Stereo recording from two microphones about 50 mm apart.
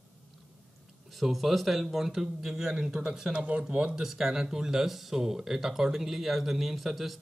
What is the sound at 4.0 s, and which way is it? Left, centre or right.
Speech, centre.